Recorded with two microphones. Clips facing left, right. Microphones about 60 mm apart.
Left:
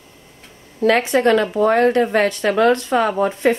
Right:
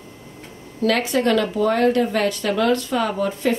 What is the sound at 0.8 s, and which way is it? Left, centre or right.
Speech, left.